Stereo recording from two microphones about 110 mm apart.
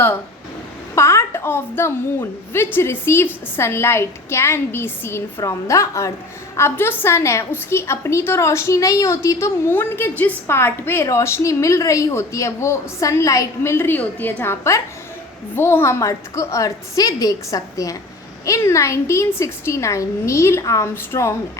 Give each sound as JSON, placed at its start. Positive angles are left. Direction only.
{"t": 0.9, "sound": "a woman's voice", "side_deg": 25}